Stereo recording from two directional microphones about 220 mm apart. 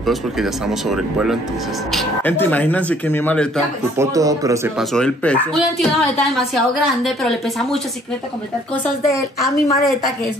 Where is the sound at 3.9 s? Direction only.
15° right (ahead or behind).